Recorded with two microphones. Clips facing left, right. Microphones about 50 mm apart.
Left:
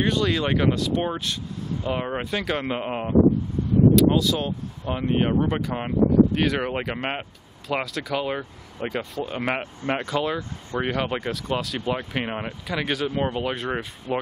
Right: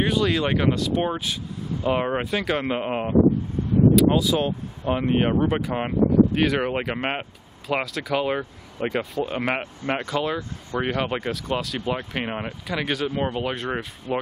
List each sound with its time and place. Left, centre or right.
0.0 s speech: centre
2.1 s speech: centre
9.9 s speech: centre